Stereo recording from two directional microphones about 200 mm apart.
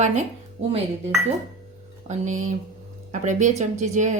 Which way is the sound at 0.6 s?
30° right (ahead or behind).